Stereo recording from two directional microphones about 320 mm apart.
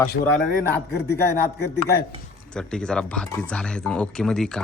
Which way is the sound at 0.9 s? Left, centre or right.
Left.